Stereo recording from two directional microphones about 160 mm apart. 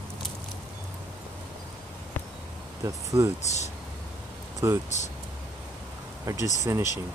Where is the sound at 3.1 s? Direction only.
20° right (ahead or behind).